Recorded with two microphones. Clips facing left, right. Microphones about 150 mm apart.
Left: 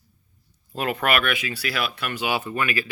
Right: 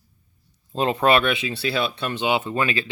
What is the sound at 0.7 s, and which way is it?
Speech, 25° right (ahead or behind).